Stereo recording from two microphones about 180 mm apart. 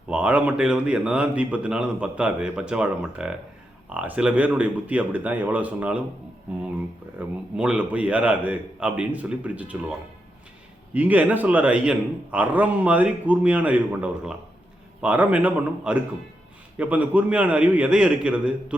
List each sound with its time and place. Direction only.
0.1 s a man's voice: 5° right (ahead or behind)
7.2 s a man's voice: 5° right (ahead or behind)
10.9 s a man's voice: 10° right (ahead or behind)